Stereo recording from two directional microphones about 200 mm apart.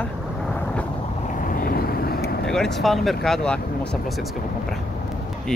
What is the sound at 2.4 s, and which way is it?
Speech, 5° left (ahead or behind).